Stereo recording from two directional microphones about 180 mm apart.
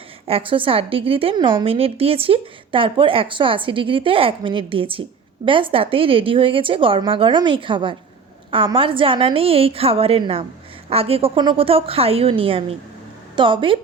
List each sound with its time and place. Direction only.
0.3 s a woman's voice: 30° right (ahead or behind)